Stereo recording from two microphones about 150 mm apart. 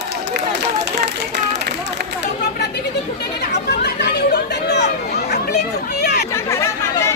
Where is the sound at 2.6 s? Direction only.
90° left.